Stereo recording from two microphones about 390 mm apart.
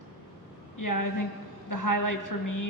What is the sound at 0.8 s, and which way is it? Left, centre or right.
A woman's voice, left.